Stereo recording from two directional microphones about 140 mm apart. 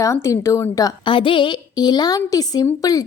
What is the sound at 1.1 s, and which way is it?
A woman's voice, 35° left (ahead or behind).